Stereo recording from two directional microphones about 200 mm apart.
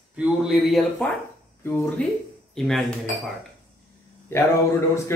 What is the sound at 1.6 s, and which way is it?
A man's voice, 10° left (ahead or behind).